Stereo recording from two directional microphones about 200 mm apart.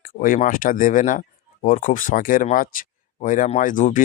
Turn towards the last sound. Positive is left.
turn(degrees=40)  # may be behind; listen again after turning